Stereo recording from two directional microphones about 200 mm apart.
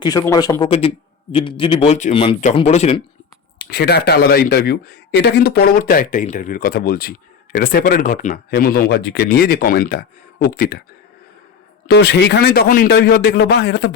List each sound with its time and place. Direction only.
0.0 s a man's voice: 20° left (ahead or behind)
3.6 s speech: 55° left (ahead or behind)
11.9 s speech: 60° left (ahead or behind)